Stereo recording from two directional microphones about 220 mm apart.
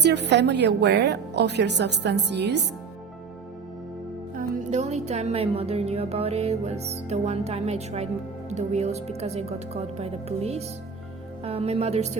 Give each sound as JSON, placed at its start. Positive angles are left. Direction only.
{"t": 0.0, "sound": "a woman's voice", "side_deg": -50}
{"t": 4.4, "sound": "speech", "side_deg": -35}